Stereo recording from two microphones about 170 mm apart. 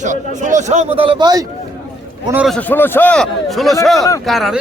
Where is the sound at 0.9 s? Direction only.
30° right (ahead or behind).